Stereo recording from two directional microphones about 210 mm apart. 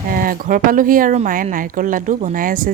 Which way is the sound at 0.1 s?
40° right (ahead or behind).